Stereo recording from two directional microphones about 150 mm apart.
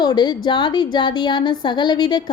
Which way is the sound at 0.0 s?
30° left (ahead or behind).